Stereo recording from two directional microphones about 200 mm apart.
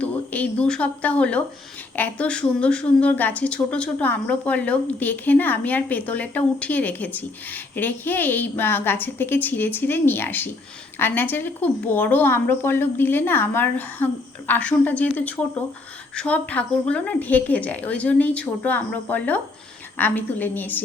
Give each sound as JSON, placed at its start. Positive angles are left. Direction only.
{"t": 0.0, "sound": "speech", "side_deg": 5}